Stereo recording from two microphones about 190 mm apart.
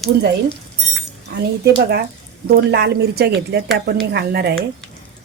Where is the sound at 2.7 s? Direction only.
60° right (ahead or behind).